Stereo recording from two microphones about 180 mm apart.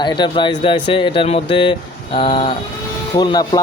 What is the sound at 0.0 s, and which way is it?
Speech, 25° left (ahead or behind).